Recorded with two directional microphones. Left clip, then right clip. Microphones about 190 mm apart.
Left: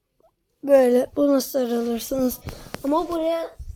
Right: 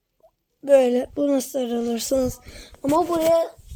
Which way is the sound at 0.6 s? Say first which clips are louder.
Left 1 dB; 10° right (ahead or behind).